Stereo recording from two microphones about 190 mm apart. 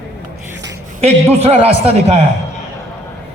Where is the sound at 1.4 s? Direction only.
35° right (ahead or behind).